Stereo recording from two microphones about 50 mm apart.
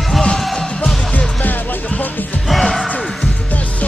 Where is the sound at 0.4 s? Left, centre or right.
Centre.